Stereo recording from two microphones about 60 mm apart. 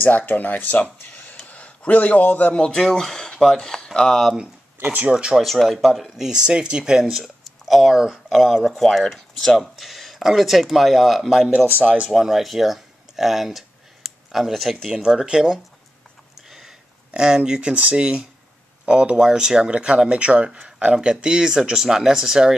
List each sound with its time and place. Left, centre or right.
0.0 s speech: left
2.8 s speech: centre
4.8 s speech: right
5.1 s speech: centre
5.4 s speech: centre
11.5 s speech: right
12.1 s speech: centre
16.4 s a sound: centre
17.1 s speech: centre